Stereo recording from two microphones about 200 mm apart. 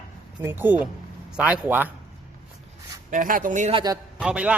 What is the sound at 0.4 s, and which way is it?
A man's voice, 10° right (ahead or behind).